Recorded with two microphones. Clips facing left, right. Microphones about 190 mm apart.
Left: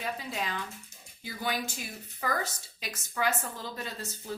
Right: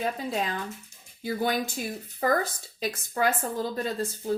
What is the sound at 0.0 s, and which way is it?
Speech, 40° right (ahead or behind).